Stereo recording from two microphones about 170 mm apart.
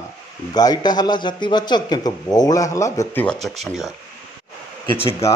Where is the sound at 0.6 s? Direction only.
25° left (ahead or behind).